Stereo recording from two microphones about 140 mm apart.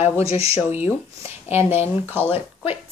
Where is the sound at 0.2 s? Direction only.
45° left (ahead or behind).